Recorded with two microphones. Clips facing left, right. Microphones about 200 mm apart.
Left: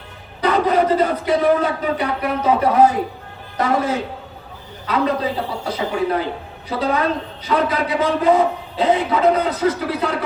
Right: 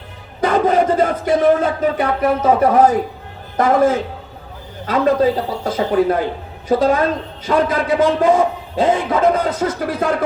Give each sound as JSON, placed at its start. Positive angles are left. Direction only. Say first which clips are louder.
{"t": 0.4, "sound": "a man's voice", "louder": "right 2 dB", "side_deg": -50}